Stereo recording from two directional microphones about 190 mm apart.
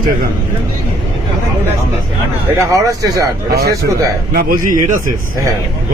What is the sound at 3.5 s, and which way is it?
A man's voice, 55° right (ahead or behind).